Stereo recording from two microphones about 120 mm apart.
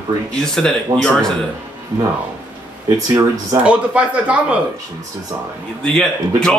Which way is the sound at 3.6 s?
10° right (ahead or behind).